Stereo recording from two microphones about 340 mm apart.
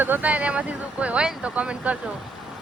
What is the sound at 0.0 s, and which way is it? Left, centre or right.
Speech, centre.